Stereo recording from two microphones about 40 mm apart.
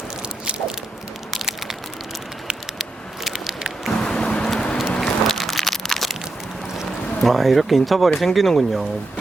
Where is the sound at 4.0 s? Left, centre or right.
Centre.